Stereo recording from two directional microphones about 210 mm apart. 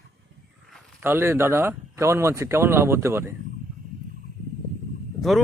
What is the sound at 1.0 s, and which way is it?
Speech, 10° right (ahead or behind).